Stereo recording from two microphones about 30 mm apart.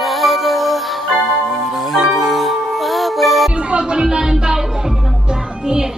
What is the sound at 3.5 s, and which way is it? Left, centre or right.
Music, right.